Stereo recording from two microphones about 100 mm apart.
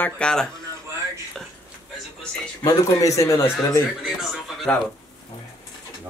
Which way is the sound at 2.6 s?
40° left (ahead or behind).